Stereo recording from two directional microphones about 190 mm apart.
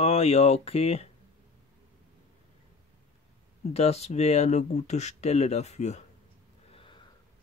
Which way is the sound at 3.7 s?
35° left (ahead or behind).